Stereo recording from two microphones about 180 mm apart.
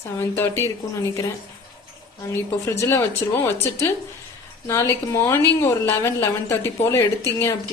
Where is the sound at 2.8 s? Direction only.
15° left (ahead or behind).